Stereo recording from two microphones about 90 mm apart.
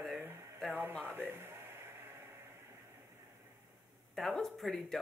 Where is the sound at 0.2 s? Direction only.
25° right (ahead or behind).